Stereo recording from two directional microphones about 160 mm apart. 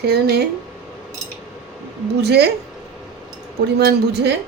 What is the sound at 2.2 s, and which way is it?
Speech, 90° right.